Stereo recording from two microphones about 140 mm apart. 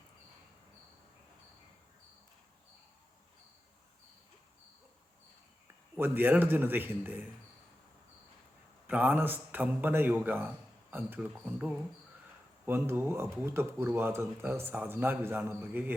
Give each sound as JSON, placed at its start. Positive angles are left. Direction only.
{"t": 6.0, "sound": "speech", "side_deg": -15}
{"t": 8.9, "sound": "speech", "side_deg": -10}